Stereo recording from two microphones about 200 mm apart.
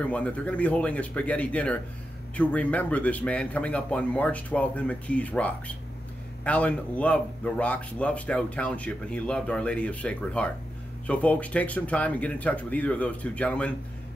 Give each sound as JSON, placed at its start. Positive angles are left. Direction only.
{"t": 0.0, "sound": "speech", "side_deg": 5}